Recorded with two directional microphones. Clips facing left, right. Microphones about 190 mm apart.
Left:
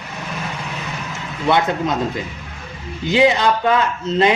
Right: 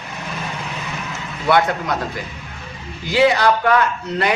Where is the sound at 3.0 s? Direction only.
20° left (ahead or behind).